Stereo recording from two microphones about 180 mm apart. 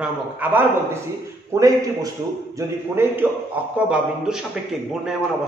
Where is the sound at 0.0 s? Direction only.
10° right (ahead or behind).